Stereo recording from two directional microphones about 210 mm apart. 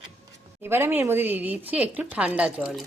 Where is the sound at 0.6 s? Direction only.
10° right (ahead or behind).